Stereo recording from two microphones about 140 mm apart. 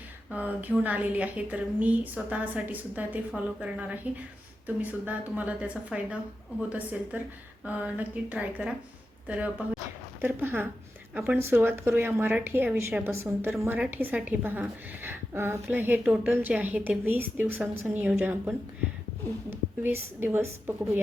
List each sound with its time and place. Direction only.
0.3 s a woman's voice: 10° right (ahead or behind)